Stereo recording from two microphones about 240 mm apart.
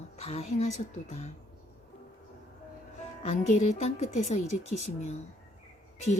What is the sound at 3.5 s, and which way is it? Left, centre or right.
Speech, left.